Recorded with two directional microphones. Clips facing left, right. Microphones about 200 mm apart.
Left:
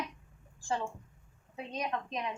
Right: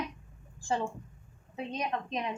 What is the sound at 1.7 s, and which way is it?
Speech, 25° right (ahead or behind).